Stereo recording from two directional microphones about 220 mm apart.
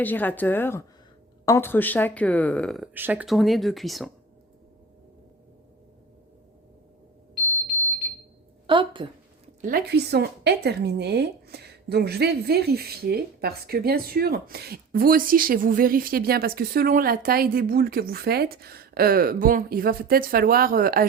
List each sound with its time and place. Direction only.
0.0 s a woman's voice: 10° left (ahead or behind)
8.6 s a woman's voice: 20° right (ahead or behind)
9.6 s speech: 40° right (ahead or behind)